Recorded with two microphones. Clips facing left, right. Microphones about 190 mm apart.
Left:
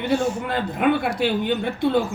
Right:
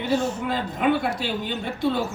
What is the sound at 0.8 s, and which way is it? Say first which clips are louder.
Speech: left 3 dB; 55° left (ahead or behind).